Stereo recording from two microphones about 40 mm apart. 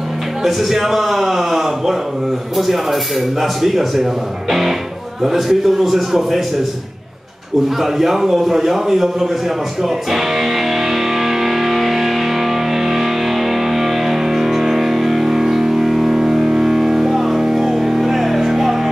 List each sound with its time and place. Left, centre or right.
0.4 s a man's voice: centre
7.8 s a man's voice: centre
10.1 s music: centre